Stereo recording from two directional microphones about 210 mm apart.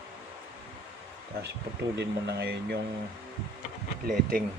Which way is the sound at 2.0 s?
50° right (ahead or behind).